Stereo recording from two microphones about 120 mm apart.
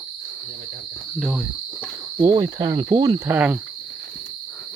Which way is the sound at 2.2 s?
35° right (ahead or behind).